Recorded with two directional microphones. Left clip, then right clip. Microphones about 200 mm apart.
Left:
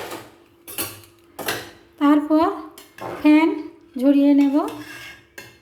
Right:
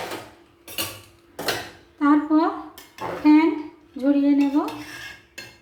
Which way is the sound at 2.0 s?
45° left (ahead or behind).